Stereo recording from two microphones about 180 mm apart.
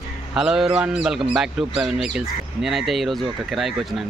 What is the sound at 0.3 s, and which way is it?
Speech, 5° right (ahead or behind).